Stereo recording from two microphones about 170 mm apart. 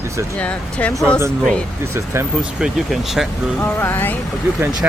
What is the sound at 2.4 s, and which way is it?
Speech, 5° right (ahead or behind).